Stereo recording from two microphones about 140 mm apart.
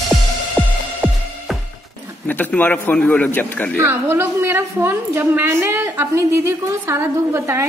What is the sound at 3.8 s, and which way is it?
A woman's voice, 15° right (ahead or behind).